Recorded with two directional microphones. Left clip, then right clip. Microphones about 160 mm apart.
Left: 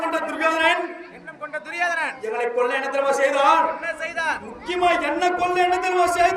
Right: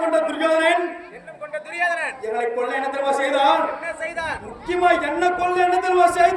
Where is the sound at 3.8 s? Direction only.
10° left (ahead or behind).